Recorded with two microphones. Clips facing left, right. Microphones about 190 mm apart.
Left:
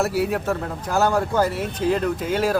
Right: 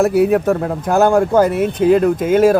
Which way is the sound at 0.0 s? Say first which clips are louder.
Right 9 dB; 55° right (ahead or behind).